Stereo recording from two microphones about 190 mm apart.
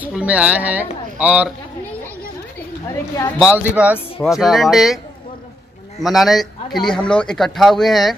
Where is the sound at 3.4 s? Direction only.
5° right (ahead or behind).